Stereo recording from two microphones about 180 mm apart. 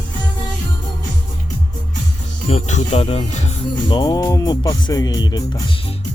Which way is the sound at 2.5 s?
40° left (ahead or behind).